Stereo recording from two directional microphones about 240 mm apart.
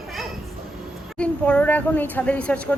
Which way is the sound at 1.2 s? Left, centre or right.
Centre.